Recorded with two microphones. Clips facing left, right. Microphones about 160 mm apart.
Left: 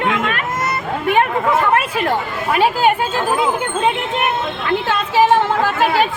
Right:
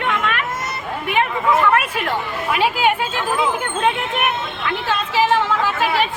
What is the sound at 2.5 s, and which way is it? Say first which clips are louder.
Speech: left 4 dB; 45° left (ahead or behind).